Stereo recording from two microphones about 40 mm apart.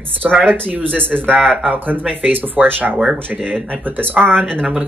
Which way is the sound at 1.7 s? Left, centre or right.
Right.